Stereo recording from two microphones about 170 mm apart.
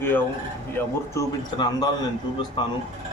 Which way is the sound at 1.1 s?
25° left (ahead or behind).